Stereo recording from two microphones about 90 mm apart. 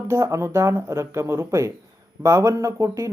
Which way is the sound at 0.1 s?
30° right (ahead or behind).